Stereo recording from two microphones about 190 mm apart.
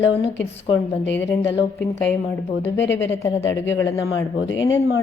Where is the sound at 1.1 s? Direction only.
10° left (ahead or behind).